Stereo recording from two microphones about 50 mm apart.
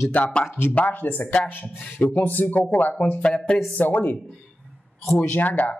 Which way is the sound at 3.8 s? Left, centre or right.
Left.